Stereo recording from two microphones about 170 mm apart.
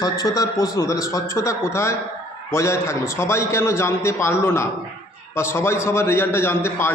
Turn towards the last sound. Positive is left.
turn(degrees=15)  # may be behind; listen again after turning